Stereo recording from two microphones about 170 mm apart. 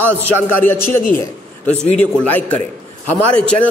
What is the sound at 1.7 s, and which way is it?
Speech, 40° left (ahead or behind).